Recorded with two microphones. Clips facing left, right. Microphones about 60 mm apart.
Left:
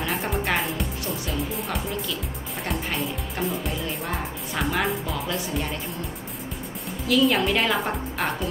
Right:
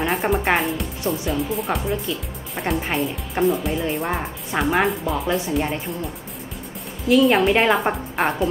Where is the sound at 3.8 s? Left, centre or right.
Right.